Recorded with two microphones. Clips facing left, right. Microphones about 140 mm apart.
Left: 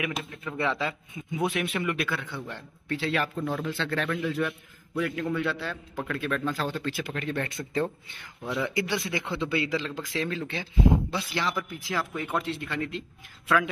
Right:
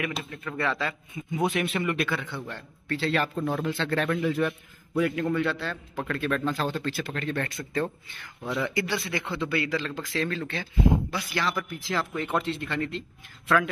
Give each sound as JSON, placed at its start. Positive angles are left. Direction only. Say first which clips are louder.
{"t": 0.5, "sound": "speech", "louder": "even", "side_deg": 15}
{"t": 3.3, "sound": "speech", "louder": "right 2 dB", "side_deg": -20}
{"t": 3.6, "sound": "a man's voice", "louder": "right 3 dB", "side_deg": 0}
{"t": 8.5, "sound": "speech", "louder": "even", "side_deg": 10}